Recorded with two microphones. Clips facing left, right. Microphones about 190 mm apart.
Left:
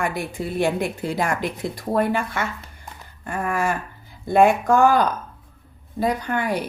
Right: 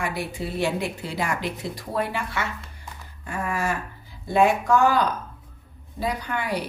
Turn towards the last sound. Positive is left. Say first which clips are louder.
# left 4 dB
turn(degrees=50)  # may be behind; listen again after turning